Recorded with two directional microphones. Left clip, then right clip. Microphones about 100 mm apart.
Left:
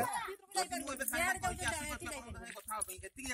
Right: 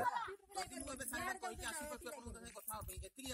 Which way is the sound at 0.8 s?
Centre (ahead or behind).